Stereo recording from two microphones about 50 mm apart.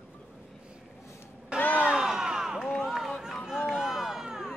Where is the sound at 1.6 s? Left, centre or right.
Left.